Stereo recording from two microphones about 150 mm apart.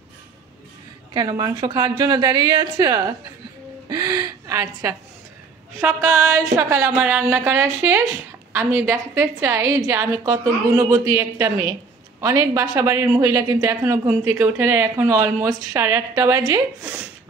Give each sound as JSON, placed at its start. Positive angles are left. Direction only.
{"t": 1.1, "sound": "a woman's voice", "side_deg": -25}
{"t": 3.9, "sound": "gasp", "side_deg": -30}
{"t": 5.8, "sound": "mantra", "side_deg": -15}
{"t": 8.5, "sound": "a woman's voice", "side_deg": -15}